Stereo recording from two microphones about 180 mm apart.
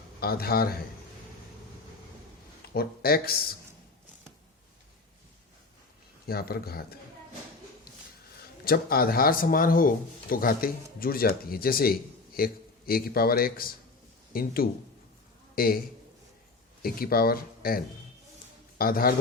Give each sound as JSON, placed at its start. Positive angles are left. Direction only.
{"t": 0.2, "sound": "speech", "side_deg": 60}
{"t": 2.7, "sound": "speech", "side_deg": 60}
{"t": 6.2, "sound": "speech", "side_deg": 60}
{"t": 7.9, "sound": "a sound", "side_deg": 60}
{"t": 8.6, "sound": "a man's voice", "side_deg": 55}
{"t": 16.8, "sound": "speech", "side_deg": 55}